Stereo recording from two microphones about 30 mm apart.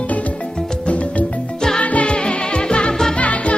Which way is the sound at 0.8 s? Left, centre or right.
Left.